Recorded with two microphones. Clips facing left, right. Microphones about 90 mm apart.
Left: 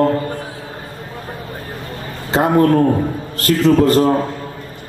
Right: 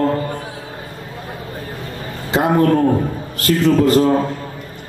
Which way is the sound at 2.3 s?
40° left (ahead or behind).